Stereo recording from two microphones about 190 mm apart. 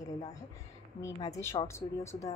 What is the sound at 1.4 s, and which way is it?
Speech, 15° left (ahead or behind).